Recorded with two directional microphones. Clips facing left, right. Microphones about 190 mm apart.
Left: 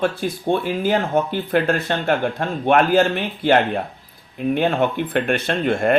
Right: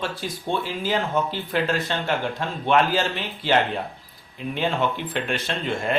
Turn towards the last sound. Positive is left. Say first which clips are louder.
# left 7 dB
turn(degrees=55)  # may be behind; listen again after turning